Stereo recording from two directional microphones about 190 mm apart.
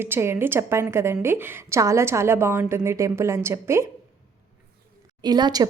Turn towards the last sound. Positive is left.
turn(degrees=-20)  # may be behind; listen again after turning